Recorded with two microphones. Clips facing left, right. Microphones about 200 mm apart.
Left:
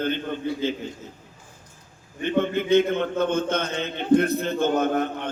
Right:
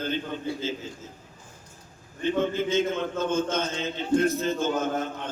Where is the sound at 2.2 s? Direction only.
60° left (ahead or behind).